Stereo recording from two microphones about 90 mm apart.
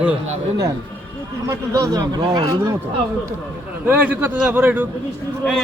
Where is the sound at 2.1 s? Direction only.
50° right (ahead or behind).